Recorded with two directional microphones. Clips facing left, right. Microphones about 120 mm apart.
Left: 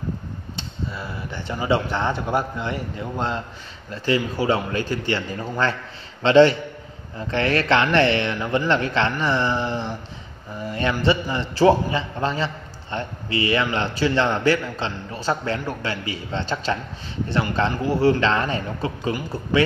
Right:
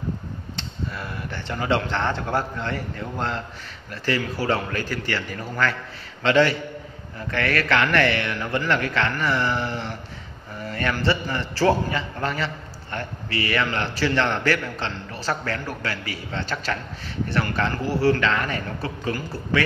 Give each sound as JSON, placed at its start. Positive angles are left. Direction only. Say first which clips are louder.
{"t": 1.3, "sound": "a man's voice", "louder": "left 2 dB", "side_deg": 10}